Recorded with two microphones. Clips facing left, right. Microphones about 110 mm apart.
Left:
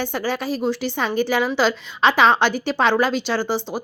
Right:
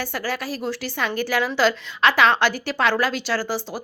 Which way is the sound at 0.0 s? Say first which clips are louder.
Left 3 dB; 20° left (ahead or behind).